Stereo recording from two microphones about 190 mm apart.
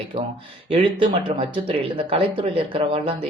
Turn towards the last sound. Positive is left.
turn(degrees=-25)  # may be behind; listen again after turning